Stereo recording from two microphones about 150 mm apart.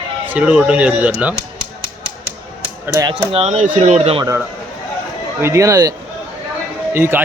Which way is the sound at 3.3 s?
45° right (ahead or behind).